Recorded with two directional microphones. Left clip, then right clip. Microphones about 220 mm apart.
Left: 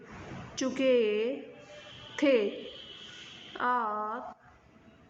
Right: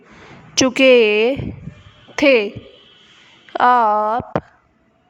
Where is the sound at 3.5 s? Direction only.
50° right (ahead or behind).